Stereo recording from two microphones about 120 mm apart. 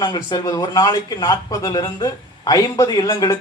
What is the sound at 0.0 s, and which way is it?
A man's voice, 35° left (ahead or behind).